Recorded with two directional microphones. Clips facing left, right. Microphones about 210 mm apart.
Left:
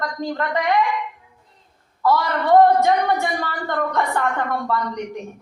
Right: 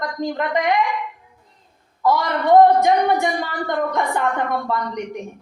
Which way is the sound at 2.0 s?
15° right (ahead or behind).